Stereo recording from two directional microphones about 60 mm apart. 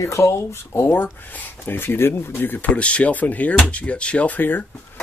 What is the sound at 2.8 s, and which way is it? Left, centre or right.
Speech, left.